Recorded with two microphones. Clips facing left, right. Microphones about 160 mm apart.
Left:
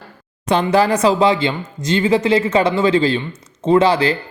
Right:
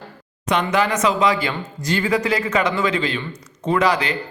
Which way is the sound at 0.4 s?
30° left (ahead or behind).